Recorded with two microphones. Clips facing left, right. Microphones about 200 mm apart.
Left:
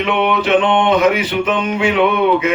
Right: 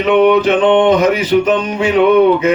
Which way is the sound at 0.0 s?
40° right (ahead or behind).